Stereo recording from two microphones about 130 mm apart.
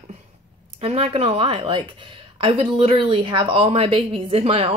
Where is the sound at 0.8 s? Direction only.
50° right (ahead or behind).